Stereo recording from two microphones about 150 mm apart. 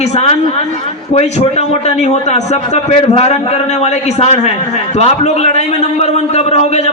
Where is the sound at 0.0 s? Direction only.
45° left (ahead or behind).